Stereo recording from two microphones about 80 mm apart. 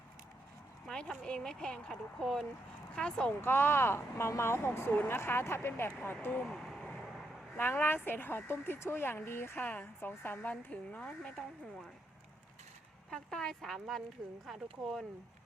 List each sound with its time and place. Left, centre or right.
0.9 s a sound: centre
1.2 s speech: centre
3.4 s speech: left
6.5 s vehicle: centre
7.5 s speech: left
13.1 s speech: centre